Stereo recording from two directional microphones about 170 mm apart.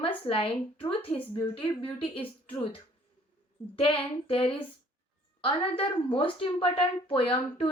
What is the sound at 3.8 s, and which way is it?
Speech, 35° left (ahead or behind).